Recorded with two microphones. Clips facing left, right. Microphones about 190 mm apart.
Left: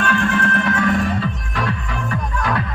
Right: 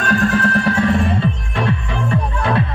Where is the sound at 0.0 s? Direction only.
40° right (ahead or behind).